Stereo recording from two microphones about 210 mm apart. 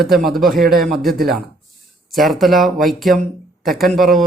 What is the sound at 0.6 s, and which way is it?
Speech, 45° right (ahead or behind).